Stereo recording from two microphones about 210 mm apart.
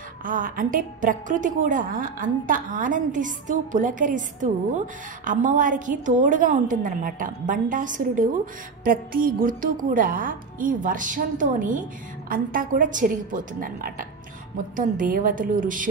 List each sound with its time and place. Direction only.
0.2 s a woman's voice: 40° right (ahead or behind)